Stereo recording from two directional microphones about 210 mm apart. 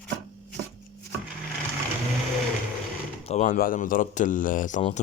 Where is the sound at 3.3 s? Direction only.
30° left (ahead or behind).